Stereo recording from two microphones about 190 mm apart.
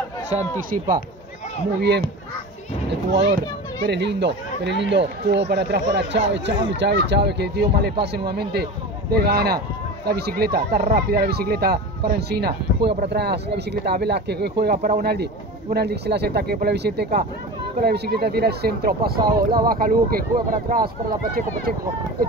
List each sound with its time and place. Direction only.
0.7 s speech: 50° right (ahead or behind)
3.8 s speech: 65° right (ahead or behind)